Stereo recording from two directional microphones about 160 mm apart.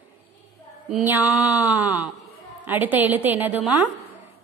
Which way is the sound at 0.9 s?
10° right (ahead or behind).